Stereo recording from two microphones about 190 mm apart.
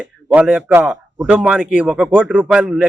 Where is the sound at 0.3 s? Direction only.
5° right (ahead or behind).